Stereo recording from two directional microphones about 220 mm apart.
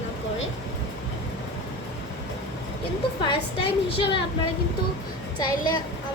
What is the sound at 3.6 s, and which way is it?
Speech, 25° left (ahead or behind).